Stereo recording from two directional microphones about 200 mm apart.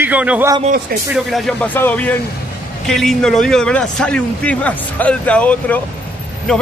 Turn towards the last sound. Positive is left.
turn(degrees=5)  # may be behind; listen again after turning